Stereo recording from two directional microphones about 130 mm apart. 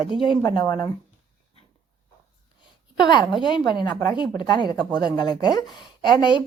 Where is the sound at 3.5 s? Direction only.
35° left (ahead or behind).